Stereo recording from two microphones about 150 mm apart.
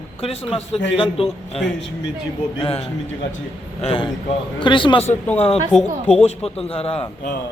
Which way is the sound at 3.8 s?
40° left (ahead or behind).